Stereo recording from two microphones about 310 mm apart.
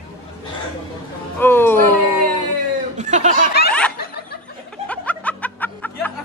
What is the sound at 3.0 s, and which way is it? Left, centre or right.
Snicker, right.